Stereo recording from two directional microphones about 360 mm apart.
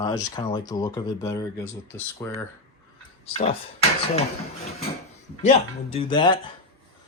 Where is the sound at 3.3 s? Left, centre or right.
Centre.